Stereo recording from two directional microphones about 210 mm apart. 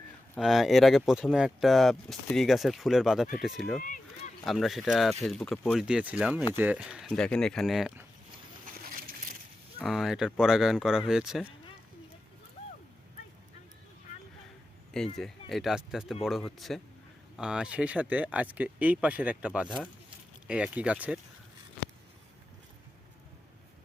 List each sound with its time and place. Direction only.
0.3 s speech: centre (ahead or behind)
3.8 s speech: 40° left (ahead or behind)
4.4 s speech: centre (ahead or behind)
9.8 s speech: centre (ahead or behind)
14.9 s speech: centre (ahead or behind)